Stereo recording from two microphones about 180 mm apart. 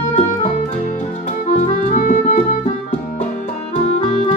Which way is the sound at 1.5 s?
45° left (ahead or behind).